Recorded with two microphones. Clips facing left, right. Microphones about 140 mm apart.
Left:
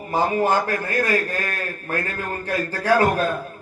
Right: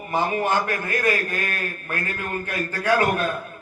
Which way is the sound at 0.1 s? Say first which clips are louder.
Left 3 dB; 30° left (ahead or behind).